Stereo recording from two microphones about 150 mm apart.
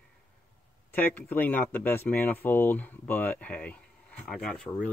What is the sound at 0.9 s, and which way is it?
Speech, 10° left (ahead or behind).